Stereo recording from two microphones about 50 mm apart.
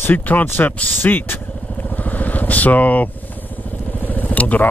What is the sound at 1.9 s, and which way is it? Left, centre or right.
Vehicle, left.